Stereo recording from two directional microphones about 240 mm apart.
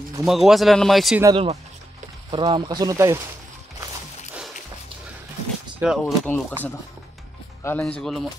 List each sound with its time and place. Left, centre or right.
0.2 s speech: centre
1.2 s speech: right
5.8 s speech: centre